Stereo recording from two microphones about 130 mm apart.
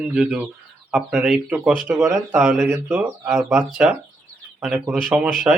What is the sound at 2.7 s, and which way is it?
Speech, 20° right (ahead or behind).